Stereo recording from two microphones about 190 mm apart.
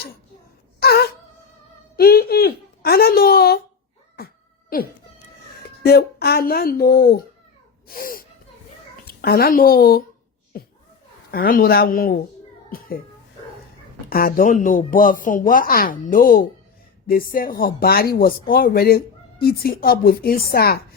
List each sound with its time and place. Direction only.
0.8 s wail: 55° left (ahead or behind)
2.0 s a sound: 50° left (ahead or behind)
4.2 s cat: 55° left (ahead or behind)
4.7 s speech: 50° left (ahead or behind)
10.5 s a sound: 50° left (ahead or behind)
11.3 s speech: 50° left (ahead or behind)
14.1 s speech: 50° left (ahead or behind)